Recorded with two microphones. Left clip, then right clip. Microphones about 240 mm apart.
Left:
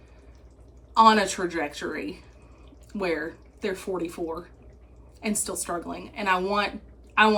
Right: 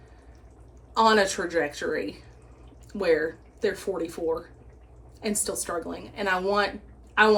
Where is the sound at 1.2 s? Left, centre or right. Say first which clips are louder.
Right 2 dB; centre.